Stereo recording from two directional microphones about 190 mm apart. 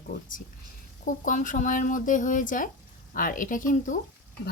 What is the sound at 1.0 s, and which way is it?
Speech, 45° left (ahead or behind).